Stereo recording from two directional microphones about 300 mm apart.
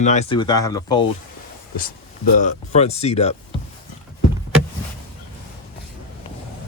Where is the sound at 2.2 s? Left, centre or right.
Left.